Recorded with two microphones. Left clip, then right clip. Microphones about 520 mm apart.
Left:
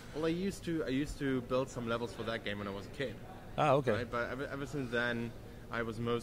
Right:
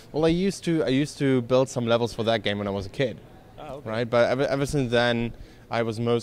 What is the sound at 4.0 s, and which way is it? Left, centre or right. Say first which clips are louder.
A man's voice: right 16 dB; right.